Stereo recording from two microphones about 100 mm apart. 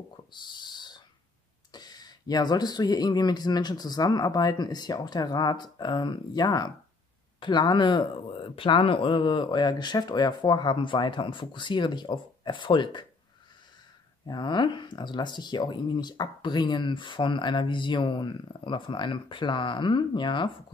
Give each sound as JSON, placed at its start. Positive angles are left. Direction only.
{"t": 0.3, "sound": "a sound", "side_deg": 50}
{"t": 1.7, "sound": "speech", "side_deg": 45}
{"t": 14.2, "sound": "speech", "side_deg": 50}